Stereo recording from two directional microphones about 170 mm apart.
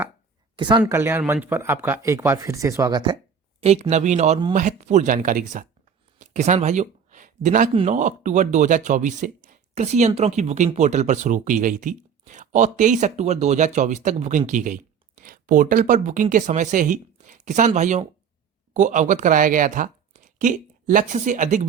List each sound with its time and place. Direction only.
0.5 s speech: 25° right (ahead or behind)
0.8 s speech: 15° right (ahead or behind)
3.6 s speech: 40° right (ahead or behind)
6.1 s a sound: 45° right (ahead or behind)
7.7 s speech: 40° right (ahead or behind)